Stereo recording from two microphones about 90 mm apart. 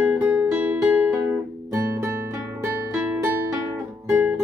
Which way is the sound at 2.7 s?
15° right (ahead or behind).